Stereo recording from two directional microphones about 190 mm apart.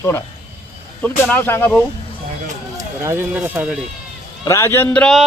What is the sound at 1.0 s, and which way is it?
Speech, 10° left (ahead or behind).